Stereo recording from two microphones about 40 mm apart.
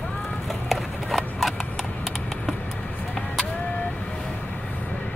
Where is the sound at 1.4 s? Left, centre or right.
Centre.